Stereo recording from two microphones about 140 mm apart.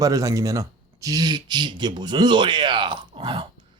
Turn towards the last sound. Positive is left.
turn(degrees=-35)  # may be behind; listen again after turning